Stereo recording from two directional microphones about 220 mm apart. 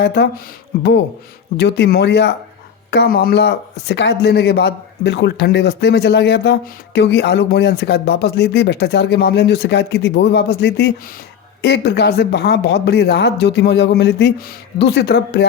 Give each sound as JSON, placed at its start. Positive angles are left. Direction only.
{"t": 0.0, "sound": "speech", "side_deg": 50}